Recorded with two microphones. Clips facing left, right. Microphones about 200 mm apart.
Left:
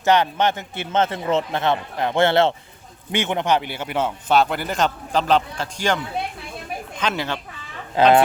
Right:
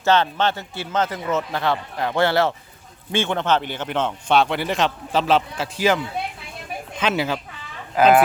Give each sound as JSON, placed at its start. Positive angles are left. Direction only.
{"t": 0.0, "sound": "a man's voice", "side_deg": 15}
{"t": 7.0, "sound": "speech", "side_deg": -5}